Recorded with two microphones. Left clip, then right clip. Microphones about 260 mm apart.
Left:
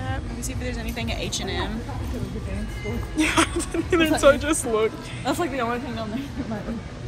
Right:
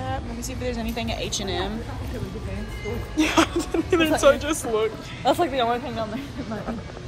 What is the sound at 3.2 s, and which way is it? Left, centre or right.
Speech, centre.